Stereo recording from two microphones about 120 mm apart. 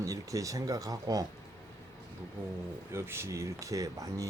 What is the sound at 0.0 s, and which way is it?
Speech, 25° right (ahead or behind).